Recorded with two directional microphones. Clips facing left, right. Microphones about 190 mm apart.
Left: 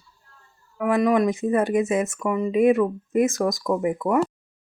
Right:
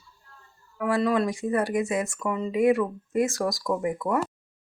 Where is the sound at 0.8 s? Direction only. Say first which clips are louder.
Left 4 dB; 15° left (ahead or behind).